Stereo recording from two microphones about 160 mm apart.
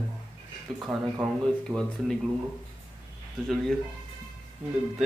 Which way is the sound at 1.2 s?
Centre (ahead or behind).